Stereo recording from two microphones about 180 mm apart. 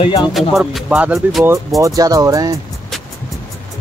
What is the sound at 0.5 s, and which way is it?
Music, centre (ahead or behind).